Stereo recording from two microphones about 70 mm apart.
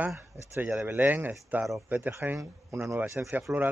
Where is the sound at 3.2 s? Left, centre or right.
Right.